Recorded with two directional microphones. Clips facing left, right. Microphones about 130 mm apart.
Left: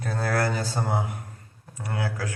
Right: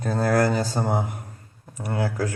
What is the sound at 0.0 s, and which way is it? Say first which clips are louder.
Speech: right 5 dB; 25° right (ahead or behind).